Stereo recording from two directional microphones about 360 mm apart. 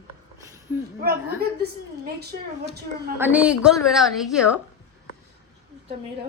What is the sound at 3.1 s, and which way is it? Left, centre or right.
A woman's voice, centre.